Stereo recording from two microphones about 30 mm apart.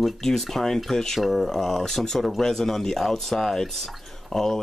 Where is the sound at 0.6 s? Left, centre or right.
Centre.